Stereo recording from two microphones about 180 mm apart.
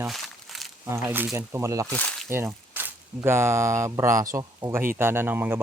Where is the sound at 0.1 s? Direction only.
Centre (ahead or behind).